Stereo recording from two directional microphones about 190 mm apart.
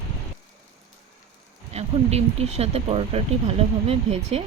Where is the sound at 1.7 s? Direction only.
35° right (ahead or behind).